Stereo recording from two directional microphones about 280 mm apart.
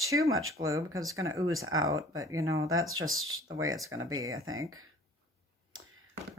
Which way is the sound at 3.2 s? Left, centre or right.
Right.